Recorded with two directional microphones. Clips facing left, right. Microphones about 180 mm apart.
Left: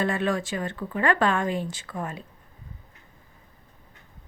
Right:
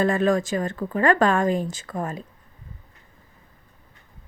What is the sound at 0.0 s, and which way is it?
Speech, 40° right (ahead or behind).